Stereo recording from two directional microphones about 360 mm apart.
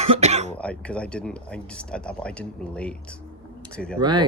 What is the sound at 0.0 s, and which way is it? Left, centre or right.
Cough, centre.